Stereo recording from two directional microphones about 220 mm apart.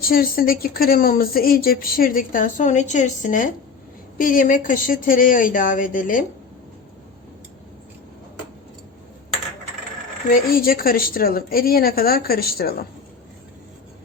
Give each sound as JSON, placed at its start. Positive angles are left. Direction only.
{"t": 0.0, "sound": "speech", "side_deg": 40}
{"t": 10.2, "sound": "speech", "side_deg": 40}